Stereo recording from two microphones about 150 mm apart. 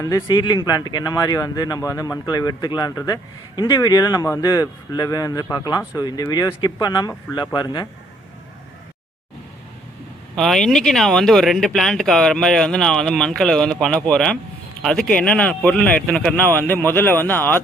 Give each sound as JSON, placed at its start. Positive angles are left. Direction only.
{"t": 0.0, "sound": "speech", "side_deg": 25}
{"t": 10.3, "sound": "speech", "side_deg": 0}